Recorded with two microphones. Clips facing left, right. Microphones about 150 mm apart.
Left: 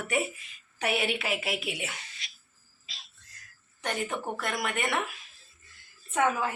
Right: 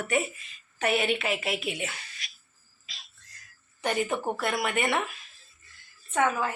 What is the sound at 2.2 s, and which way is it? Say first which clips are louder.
Cough: right 1 dB; 25° left (ahead or behind).